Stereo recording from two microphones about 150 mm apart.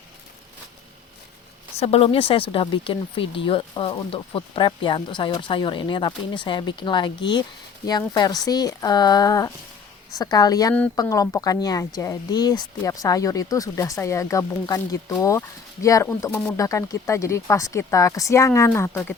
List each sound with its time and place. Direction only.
1.8 s speech: 40° left (ahead or behind); by 19.1 s 15° left (ahead or behind)